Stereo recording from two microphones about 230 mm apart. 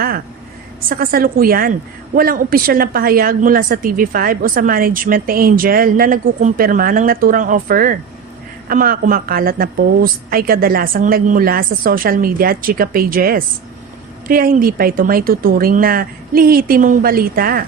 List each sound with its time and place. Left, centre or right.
0.9 s a woman's voice: right